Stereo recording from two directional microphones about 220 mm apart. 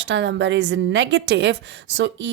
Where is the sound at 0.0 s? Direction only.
55° right (ahead or behind).